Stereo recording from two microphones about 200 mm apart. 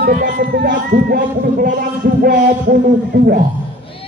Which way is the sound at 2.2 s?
40° right (ahead or behind).